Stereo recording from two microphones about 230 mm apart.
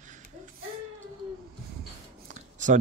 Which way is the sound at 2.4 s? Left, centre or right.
Right.